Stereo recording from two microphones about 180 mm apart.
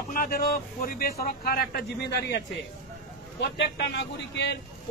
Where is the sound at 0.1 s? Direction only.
55° left (ahead or behind).